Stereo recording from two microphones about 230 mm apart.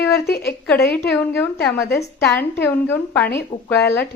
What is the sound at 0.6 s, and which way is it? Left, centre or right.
A woman's voice, centre.